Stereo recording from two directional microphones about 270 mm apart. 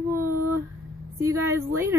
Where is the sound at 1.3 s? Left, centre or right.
Centre.